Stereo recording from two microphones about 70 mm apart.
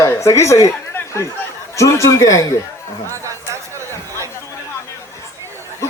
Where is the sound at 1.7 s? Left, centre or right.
Left.